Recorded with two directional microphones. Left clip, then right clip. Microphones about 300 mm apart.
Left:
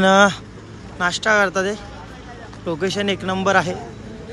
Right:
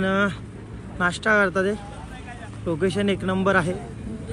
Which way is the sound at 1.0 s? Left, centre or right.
Centre.